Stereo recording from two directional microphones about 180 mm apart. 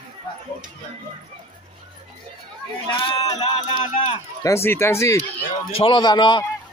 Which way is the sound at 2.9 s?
30° left (ahead or behind).